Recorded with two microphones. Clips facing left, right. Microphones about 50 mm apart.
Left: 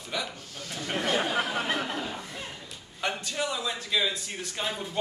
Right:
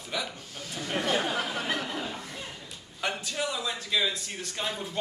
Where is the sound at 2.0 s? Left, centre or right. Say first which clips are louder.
Left 1 dB; centre.